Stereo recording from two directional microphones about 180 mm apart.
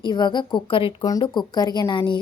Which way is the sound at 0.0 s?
25° left (ahead or behind).